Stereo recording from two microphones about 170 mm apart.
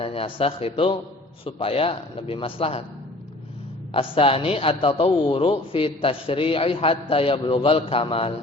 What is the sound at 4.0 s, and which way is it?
A man's voice, 35° left (ahead or behind).